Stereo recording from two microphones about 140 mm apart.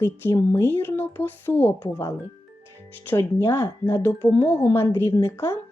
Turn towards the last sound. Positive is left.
turn(degrees=15)  # may be behind; listen again after turning